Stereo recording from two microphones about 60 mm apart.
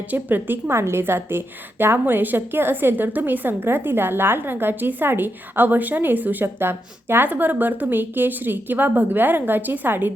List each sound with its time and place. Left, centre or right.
0.1 s a woman's voice: right